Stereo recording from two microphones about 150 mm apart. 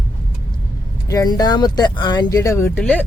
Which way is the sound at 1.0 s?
25° left (ahead or behind).